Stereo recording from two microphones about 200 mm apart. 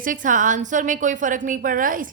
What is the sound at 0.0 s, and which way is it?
A woman's voice, 40° right (ahead or behind).